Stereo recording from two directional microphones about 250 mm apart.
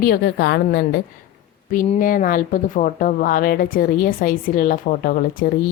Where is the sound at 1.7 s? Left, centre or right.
Left.